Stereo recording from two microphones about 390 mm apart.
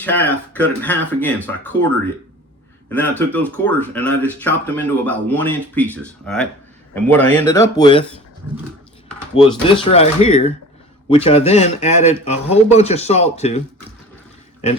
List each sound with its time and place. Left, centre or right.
0.0 s speech: centre
2.9 s a man's voice: centre
9.3 s a man's voice: centre